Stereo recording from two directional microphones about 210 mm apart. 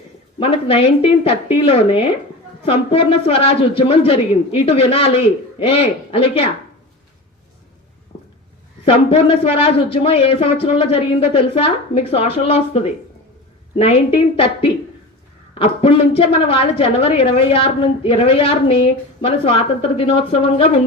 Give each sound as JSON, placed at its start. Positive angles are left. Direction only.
{"t": 0.3, "sound": "a woman's voice", "side_deg": 25}
{"t": 8.8, "sound": "a woman's voice", "side_deg": 25}